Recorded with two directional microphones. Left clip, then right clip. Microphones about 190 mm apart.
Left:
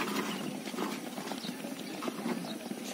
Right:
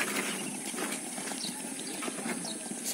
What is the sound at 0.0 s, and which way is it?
Vehicle, 50° left (ahead or behind).